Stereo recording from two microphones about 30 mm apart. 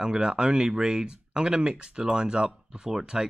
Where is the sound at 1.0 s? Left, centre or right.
Right.